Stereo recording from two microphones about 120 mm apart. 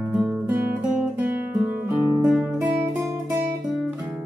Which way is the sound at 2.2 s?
10° right (ahead or behind).